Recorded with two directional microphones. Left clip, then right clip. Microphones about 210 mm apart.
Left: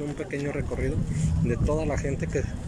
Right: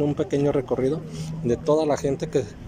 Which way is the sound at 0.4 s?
20° right (ahead or behind).